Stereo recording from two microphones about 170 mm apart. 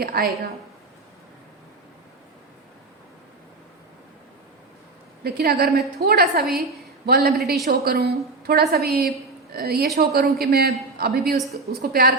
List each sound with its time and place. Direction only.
0.0 s a woman's voice: 65° right (ahead or behind)
5.2 s a woman's voice: 65° right (ahead or behind)